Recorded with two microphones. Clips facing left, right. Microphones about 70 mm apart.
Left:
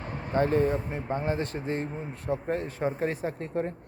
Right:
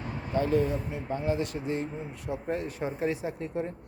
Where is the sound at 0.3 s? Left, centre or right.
Left.